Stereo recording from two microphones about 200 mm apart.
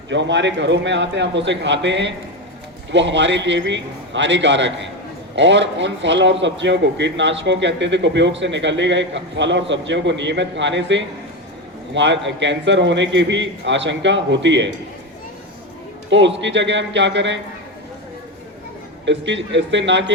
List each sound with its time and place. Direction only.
0.1 s speech: 65° right (ahead or behind)
16.0 s speech: 65° right (ahead or behind)
19.0 s speech: 65° right (ahead or behind)